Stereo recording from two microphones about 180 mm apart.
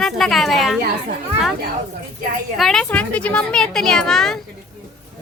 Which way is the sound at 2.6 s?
Centre (ahead or behind).